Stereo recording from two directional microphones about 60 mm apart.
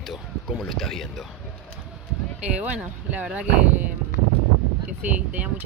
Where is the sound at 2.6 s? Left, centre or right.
Right.